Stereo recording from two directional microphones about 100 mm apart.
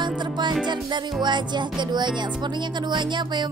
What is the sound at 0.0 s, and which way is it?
Music, 50° right (ahead or behind).